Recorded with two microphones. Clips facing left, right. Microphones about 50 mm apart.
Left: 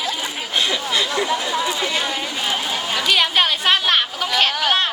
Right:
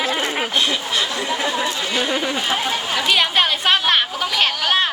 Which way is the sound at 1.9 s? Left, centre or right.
Right.